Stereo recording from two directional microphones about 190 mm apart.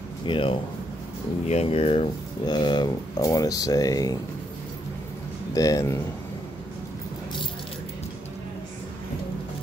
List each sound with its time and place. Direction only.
0.3 s speech: 30° left (ahead or behind)
5.5 s speech: 20° left (ahead or behind)